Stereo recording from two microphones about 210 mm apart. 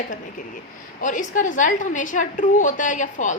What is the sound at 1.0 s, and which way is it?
A woman's voice, 35° left (ahead or behind).